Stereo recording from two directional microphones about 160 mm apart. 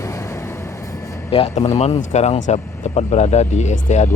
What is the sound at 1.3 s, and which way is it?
Speech, 40° left (ahead or behind).